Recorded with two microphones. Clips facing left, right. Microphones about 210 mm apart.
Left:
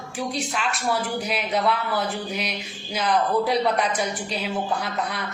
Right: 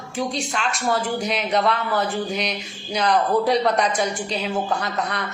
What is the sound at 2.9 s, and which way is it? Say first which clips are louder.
Speech: right 3 dB; 5° left (ahead or behind).